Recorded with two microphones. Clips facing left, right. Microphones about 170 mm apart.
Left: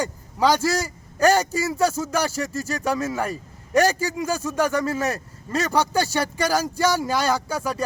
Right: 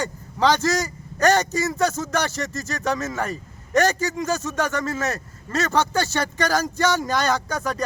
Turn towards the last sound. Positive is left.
turn(degrees=10)  # may be behind; listen again after turning